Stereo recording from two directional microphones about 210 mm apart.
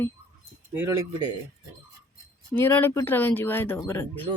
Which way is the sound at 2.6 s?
10° left (ahead or behind).